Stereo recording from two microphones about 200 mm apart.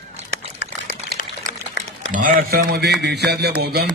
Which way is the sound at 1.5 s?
45° left (ahead or behind).